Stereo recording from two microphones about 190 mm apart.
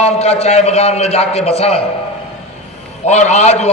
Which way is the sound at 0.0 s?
35° left (ahead or behind).